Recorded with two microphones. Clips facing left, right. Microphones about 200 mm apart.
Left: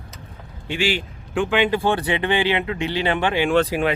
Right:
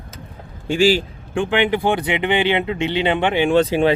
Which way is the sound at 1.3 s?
20° right (ahead or behind).